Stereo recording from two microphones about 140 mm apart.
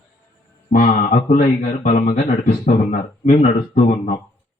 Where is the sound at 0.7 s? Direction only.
75° left (ahead or behind).